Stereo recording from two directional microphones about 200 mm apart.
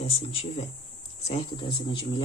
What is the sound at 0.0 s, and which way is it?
Speech, 30° left (ahead or behind).